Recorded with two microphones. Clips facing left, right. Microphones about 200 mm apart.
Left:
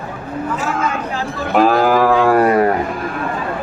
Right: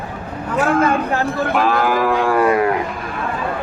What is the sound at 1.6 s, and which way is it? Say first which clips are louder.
Cattle: left 6 dB; 40° left (ahead or behind).